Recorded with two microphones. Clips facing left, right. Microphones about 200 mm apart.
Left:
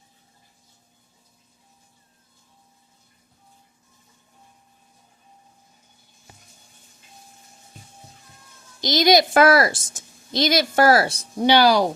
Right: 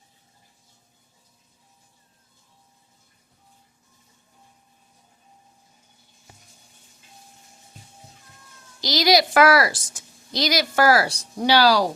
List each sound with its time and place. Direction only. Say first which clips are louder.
8.8 s a woman's voice: left 2 dB; 20° left (ahead or behind)